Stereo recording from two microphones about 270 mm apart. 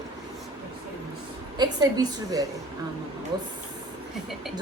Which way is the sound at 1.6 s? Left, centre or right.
Centre.